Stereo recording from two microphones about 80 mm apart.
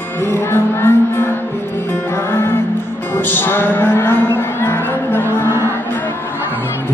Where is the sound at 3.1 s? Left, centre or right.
Left.